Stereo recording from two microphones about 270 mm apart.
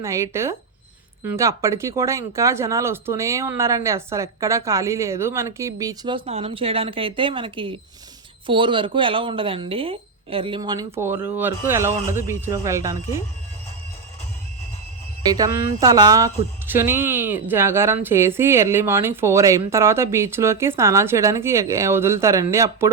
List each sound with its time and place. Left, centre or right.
0.0 s speech: centre
15.3 s speech: centre